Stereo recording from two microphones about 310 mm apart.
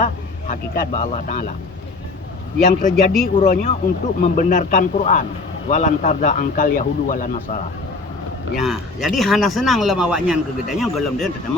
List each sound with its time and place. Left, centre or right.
0.0 s speech: left
2.9 s speech: centre
3.3 s speech: left
8.5 s speech: centre